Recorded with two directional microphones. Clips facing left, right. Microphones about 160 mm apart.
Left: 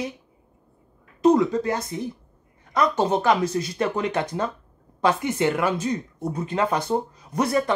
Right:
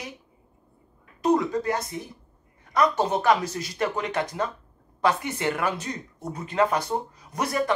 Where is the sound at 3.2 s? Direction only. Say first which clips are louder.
Left 2 dB; 25° left (ahead or behind).